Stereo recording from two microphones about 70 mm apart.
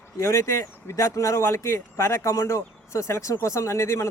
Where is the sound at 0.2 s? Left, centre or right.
Left.